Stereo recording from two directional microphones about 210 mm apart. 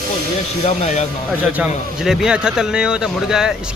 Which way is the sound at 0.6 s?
30° left (ahead or behind).